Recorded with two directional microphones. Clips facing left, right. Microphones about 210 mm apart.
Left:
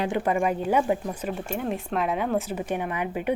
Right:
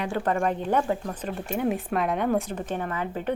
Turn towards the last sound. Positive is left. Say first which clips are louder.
# left 1 dB
turn(degrees=15)  # may be behind; listen again after turning